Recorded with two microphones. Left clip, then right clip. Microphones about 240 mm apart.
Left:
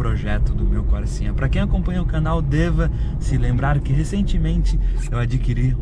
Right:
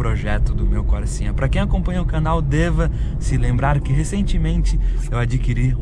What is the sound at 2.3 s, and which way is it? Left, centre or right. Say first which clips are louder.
Speech: right 4 dB; right.